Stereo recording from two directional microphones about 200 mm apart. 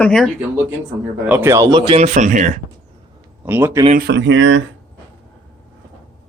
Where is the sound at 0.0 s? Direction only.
5° left (ahead or behind).